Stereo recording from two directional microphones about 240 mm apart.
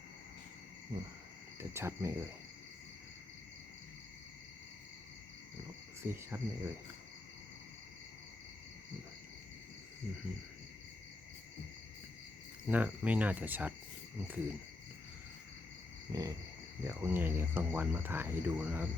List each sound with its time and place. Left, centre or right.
0.9 s speech: centre
6.0 s speech: centre
12.6 s speech: centre
16.1 s speech: centre